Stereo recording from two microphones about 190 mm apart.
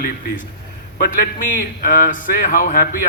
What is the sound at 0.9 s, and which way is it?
A man's voice, 45° left (ahead or behind).